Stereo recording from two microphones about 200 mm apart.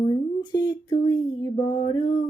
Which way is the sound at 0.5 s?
20° left (ahead or behind).